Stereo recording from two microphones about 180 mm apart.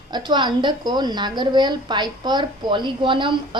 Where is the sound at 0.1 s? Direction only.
25° right (ahead or behind).